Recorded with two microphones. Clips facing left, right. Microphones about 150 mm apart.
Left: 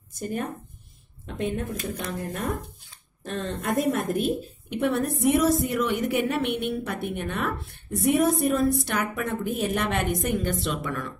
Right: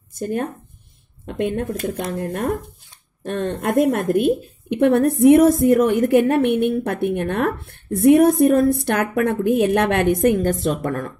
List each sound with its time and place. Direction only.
0.1 s a woman's voice: 55° right (ahead or behind)